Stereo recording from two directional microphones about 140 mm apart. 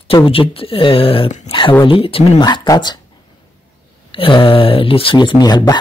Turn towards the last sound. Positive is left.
turn(degrees=30)  # may be behind; listen again after turning